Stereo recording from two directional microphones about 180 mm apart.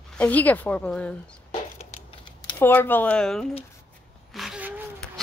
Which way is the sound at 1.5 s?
40° left (ahead or behind).